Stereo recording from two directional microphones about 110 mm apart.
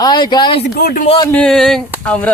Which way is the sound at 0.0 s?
40° left (ahead or behind).